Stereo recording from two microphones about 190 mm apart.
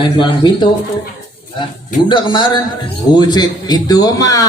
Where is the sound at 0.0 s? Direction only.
25° left (ahead or behind).